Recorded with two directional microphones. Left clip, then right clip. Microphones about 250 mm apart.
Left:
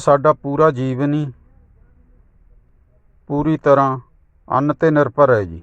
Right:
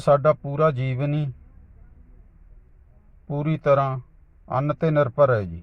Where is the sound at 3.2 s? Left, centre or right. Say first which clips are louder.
Left 7 dB; left.